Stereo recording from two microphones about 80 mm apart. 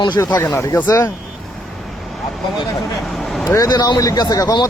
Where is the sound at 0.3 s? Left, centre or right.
Left.